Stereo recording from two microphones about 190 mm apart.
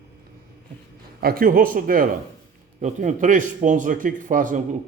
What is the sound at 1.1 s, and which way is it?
A man's voice, 50° right (ahead or behind).